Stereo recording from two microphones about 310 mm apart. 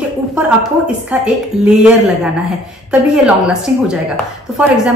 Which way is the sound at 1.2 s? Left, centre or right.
Centre.